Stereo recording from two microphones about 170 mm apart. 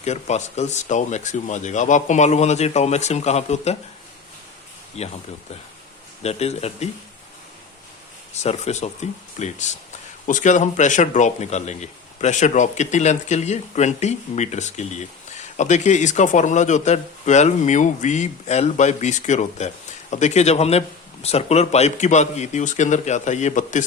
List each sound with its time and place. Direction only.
0.0 s speech: 40° left (ahead or behind)
5.0 s speech: 40° left (ahead or behind)
6.2 s speech: 40° left (ahead or behind)
8.3 s speech: 40° left (ahead or behind)